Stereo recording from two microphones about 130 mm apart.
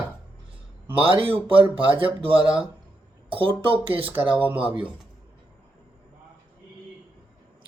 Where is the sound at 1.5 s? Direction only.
40° right (ahead or behind).